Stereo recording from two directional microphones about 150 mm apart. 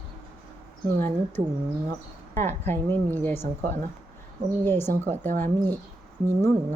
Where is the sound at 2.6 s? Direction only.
15° left (ahead or behind).